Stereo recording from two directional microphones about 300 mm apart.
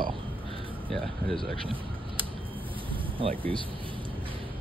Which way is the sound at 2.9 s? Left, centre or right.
Centre.